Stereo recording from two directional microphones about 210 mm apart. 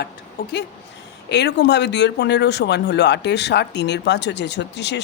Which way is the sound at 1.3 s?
55° left (ahead or behind).